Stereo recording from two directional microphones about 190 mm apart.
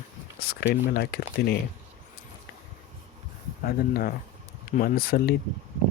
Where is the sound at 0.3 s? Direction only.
55° left (ahead or behind).